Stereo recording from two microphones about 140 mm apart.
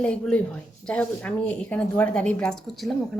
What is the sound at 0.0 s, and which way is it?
Speech, 10° left (ahead or behind).